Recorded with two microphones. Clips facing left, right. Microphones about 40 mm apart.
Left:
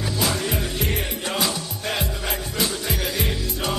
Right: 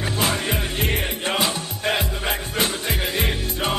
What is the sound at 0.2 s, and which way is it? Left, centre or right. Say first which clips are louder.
Music: right 1 dB; right.